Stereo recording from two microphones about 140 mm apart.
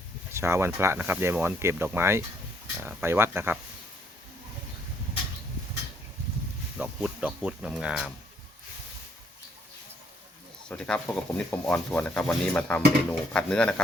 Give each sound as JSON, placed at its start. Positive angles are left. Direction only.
{"t": 0.3, "sound": "speech", "side_deg": -20}
{"t": 6.7, "sound": "speech", "side_deg": -5}
{"t": 10.7, "sound": "speech", "side_deg": 5}